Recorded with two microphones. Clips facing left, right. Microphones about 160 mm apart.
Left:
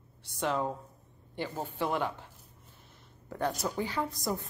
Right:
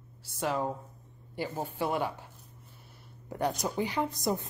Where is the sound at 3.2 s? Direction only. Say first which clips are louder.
Right 1 dB; 15° right (ahead or behind).